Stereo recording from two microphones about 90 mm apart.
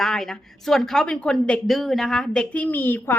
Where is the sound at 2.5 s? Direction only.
20° left (ahead or behind).